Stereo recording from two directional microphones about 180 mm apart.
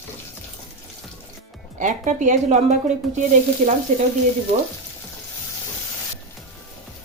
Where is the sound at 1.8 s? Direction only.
45° right (ahead or behind).